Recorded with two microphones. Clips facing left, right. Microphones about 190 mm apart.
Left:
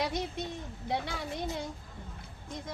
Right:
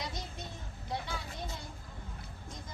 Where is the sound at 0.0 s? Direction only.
65° left (ahead or behind).